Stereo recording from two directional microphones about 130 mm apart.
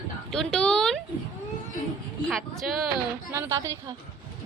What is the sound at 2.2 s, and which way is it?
Speech, centre (ahead or behind).